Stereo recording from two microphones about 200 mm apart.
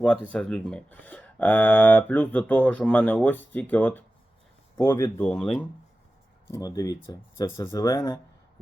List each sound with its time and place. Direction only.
0.0 s speech: 5° left (ahead or behind)
6.5 s speech: 15° left (ahead or behind)